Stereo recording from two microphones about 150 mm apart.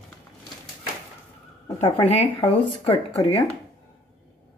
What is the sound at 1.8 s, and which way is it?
Speech, 40° left (ahead or behind).